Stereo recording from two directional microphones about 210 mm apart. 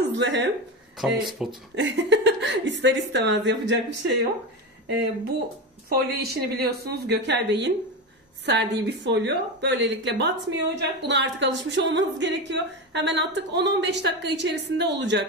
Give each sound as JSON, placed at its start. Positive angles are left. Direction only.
{"t": 0.0, "sound": "speech", "side_deg": -55}
{"t": 0.9, "sound": "speech", "side_deg": 0}
{"t": 1.8, "sound": "a woman's voice", "side_deg": -60}